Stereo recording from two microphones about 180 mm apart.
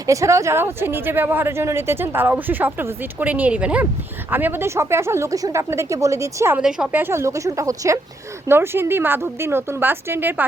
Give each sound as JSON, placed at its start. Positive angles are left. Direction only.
{"t": 0.1, "sound": "speech", "side_deg": -15}
{"t": 6.6, "sound": "speech", "side_deg": -5}